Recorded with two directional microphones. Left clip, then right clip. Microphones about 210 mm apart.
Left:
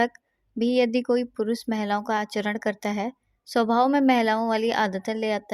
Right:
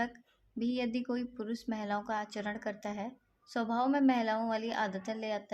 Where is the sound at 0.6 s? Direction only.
40° left (ahead or behind).